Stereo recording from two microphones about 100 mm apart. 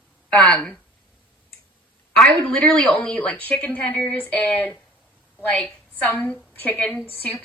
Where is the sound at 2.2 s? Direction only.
10° left (ahead or behind).